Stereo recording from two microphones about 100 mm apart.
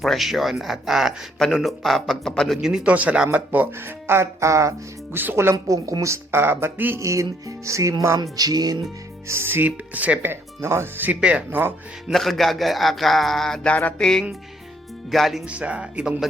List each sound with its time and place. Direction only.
0.0 s speech: centre (ahead or behind)
2.6 s speech: 5° right (ahead or behind)
7.0 s music: 30° right (ahead or behind)
9.2 s speech: 25° right (ahead or behind)
10.6 s speech: 25° right (ahead or behind)
12.1 s speech: centre (ahead or behind)
13.7 s music: 10° left (ahead or behind)
15.1 s speech: centre (ahead or behind)
15.4 s speech: 15° right (ahead or behind)